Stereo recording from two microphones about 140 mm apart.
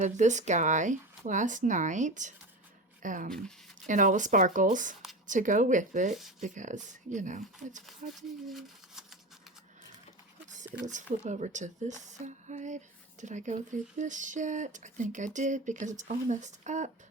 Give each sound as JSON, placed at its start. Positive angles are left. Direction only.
{"t": 0.0, "sound": "speech", "side_deg": -60}
{"t": 8.4, "sound": "a sound", "side_deg": 0}
{"t": 10.8, "sound": "speech", "side_deg": -60}